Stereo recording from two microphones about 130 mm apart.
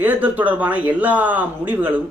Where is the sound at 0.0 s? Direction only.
15° right (ahead or behind).